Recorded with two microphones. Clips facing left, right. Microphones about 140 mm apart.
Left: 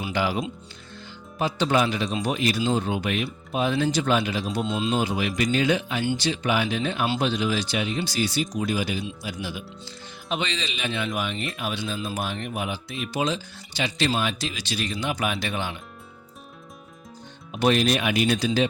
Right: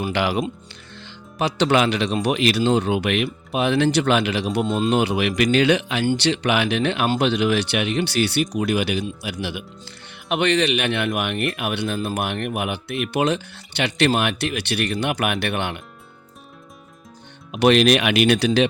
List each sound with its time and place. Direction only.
0.1 s speech: 70° right (ahead or behind)
4.6 s speech: 55° right (ahead or behind)
17.5 s speech: 70° right (ahead or behind)